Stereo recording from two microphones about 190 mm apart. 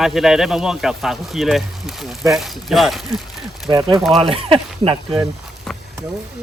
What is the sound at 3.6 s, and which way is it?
Speech, 25° right (ahead or behind).